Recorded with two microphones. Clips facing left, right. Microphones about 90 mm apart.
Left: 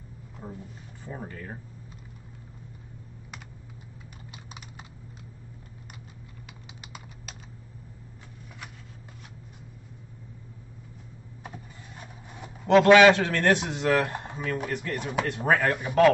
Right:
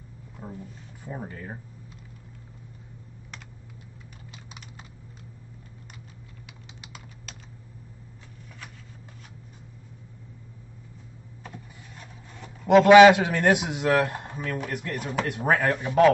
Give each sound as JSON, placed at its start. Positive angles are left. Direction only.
{"t": 1.0, "sound": "speech", "side_deg": -10}
{"t": 4.3, "sound": "typing", "side_deg": 10}
{"t": 11.4, "sound": "vehicle", "side_deg": 15}
{"t": 12.6, "sound": "a man's voice", "side_deg": -5}
{"t": 15.7, "sound": "a man's voice", "side_deg": 5}